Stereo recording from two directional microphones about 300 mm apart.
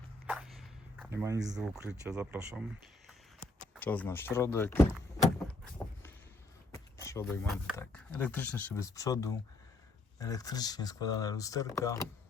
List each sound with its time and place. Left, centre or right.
0.3 s a sound: centre
1.5 s speech: centre
3.8 s speech: centre
6.7 s speech: centre